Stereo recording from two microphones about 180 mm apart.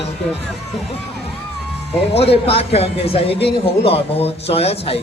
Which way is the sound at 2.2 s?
35° left (ahead or behind).